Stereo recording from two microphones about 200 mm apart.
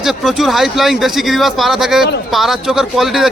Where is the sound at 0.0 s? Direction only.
Centre (ahead or behind).